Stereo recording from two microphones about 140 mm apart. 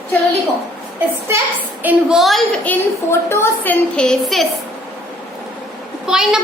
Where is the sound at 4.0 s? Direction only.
5° left (ahead or behind).